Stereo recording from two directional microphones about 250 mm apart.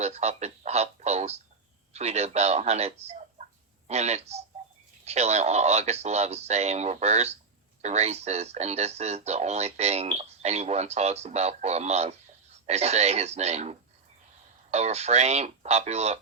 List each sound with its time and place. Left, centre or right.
0.0 s speech: right